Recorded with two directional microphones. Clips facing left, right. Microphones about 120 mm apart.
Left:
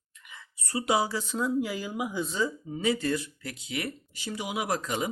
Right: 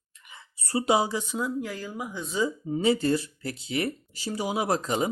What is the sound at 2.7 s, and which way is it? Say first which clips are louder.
Speech: right 4 dB; 30° right (ahead or behind).